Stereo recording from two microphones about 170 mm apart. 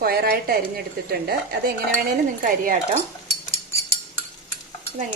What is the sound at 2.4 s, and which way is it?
Speech, 55° right (ahead or behind).